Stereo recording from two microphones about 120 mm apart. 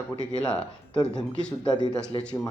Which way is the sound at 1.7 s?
35° left (ahead or behind).